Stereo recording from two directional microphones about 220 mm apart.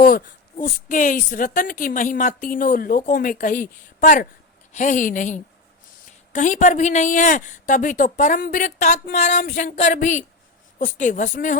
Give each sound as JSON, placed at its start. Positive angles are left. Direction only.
{"t": 0.6, "sound": "speech", "side_deg": 40}